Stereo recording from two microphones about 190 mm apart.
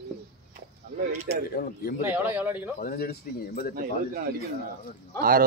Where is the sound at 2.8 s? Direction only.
50° left (ahead or behind).